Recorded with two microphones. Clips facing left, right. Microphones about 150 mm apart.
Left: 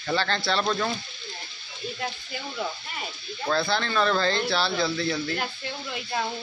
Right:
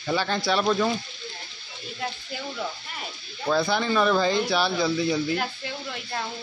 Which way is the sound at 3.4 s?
15° right (ahead or behind).